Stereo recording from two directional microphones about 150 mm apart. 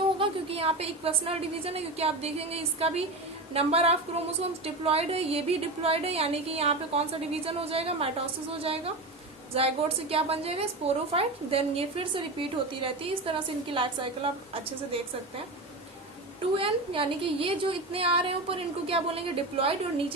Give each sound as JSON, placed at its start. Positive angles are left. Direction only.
{"t": 0.2, "sound": "a woman's voice", "side_deg": -40}
{"t": 16.6, "sound": "a woman's voice", "side_deg": -35}